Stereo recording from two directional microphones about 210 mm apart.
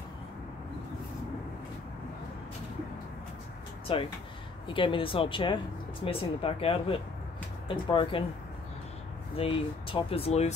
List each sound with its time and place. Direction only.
3.9 s speech: 25° left (ahead or behind)
9.4 s speech: 25° left (ahead or behind)